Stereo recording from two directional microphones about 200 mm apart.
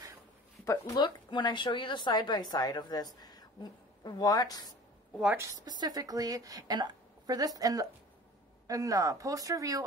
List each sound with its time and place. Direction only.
0.7 s a woman's voice: 20° left (ahead or behind)
5.2 s a woman's voice: 10° right (ahead or behind)
5.7 s a woman's voice: 20° right (ahead or behind)